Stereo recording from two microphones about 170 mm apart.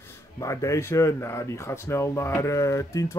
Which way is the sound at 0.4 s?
20° left (ahead or behind).